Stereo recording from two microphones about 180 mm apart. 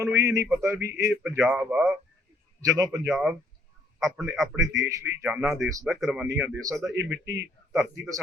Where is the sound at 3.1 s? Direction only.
5° right (ahead or behind).